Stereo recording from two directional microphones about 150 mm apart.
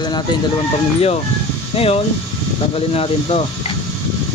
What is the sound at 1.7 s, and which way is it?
Speech, 40° left (ahead or behind).